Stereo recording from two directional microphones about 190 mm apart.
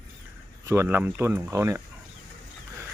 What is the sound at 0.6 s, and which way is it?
Speech, 15° right (ahead or behind).